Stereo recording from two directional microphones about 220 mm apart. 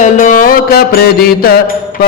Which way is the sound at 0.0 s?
35° left (ahead or behind).